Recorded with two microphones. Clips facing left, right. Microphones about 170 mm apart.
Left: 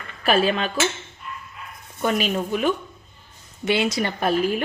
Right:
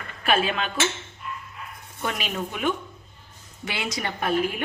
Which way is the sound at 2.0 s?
35° left (ahead or behind).